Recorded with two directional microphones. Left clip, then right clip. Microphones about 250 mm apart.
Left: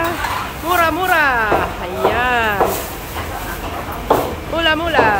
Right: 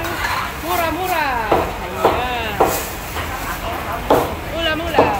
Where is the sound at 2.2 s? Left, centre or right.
Centre.